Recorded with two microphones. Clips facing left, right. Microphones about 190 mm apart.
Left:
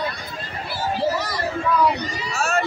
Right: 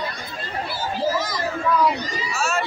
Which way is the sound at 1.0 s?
65° left (ahead or behind).